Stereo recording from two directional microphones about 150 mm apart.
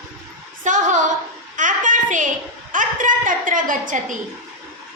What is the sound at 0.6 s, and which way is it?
Speech, 55° right (ahead or behind).